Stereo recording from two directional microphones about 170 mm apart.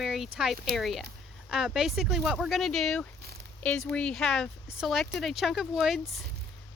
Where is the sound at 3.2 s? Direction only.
65° right (ahead or behind).